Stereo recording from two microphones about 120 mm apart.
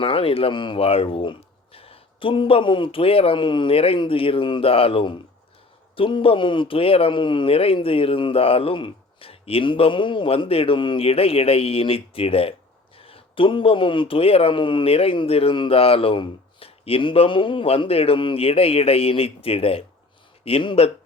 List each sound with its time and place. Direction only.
0.0 s speech: 50° left (ahead or behind)